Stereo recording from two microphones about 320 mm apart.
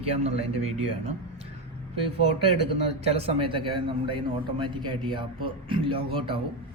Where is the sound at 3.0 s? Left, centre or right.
Centre.